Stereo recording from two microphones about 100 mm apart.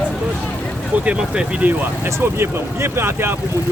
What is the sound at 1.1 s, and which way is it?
Speech, 10° right (ahead or behind).